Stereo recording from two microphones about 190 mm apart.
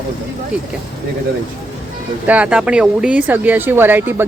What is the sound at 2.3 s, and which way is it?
Speech, 5° right (ahead or behind).